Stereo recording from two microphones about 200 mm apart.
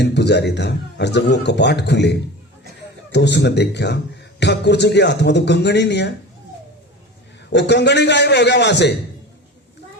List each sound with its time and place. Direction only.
0.0 s a man's voice: 60° left (ahead or behind)
7.5 s a man's voice: 60° left (ahead or behind)